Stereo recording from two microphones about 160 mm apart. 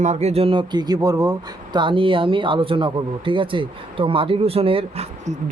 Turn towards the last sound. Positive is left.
turn(degrees=-35)  # may be behind; listen again after turning